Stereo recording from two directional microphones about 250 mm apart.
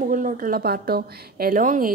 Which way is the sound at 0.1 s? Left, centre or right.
Right.